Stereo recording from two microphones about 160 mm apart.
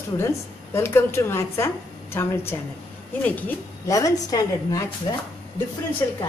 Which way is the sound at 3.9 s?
20° left (ahead or behind).